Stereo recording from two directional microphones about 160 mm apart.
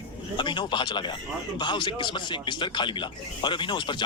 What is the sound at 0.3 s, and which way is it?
Speech, 30° left (ahead or behind).